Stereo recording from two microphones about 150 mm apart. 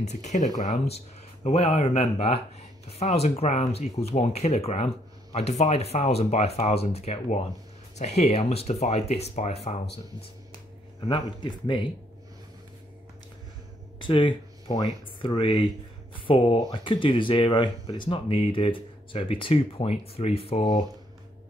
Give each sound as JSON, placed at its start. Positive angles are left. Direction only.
{"t": 0.0, "sound": "speech", "side_deg": 50}
{"t": 11.0, "sound": "speech", "side_deg": 30}
{"t": 13.9, "sound": "speech", "side_deg": 35}